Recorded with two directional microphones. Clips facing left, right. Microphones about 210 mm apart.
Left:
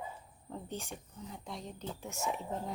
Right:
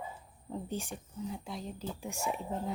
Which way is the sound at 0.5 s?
15° right (ahead or behind).